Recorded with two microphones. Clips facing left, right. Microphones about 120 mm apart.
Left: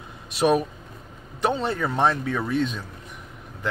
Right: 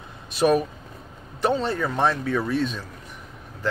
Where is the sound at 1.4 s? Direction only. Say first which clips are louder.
Right 1 dB; 15° left (ahead or behind).